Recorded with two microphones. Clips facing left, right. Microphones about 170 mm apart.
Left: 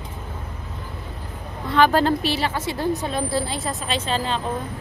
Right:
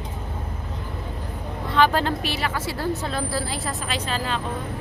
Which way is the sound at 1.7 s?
45° left (ahead or behind).